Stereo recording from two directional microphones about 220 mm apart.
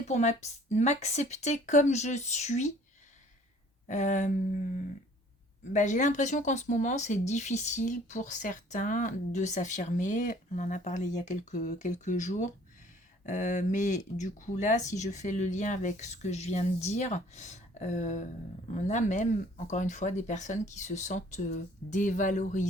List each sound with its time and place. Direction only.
0.1 s speech: 30° left (ahead or behind)
3.8 s speech: 35° left (ahead or behind)
5.7 s speech: 35° left (ahead or behind)